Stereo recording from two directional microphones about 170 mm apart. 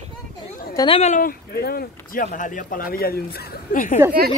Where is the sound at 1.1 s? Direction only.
55° left (ahead or behind).